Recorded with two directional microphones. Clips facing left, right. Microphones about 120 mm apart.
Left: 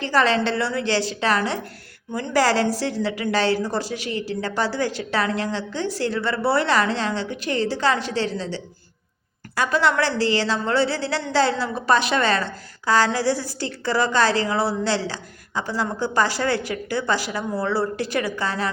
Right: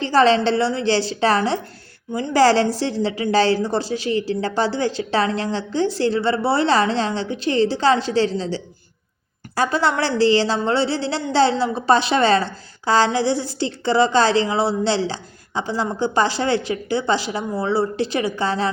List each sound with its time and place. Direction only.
0.0 s a woman's voice: 30° right (ahead or behind)